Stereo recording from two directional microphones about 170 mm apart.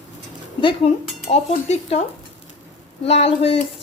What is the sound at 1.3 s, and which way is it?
Speech, 40° left (ahead or behind).